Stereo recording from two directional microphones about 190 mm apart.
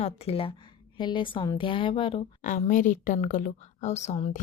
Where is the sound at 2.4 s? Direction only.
45° left (ahead or behind).